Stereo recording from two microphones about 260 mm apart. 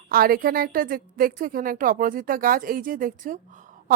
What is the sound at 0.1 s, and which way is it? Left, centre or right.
Speech, right.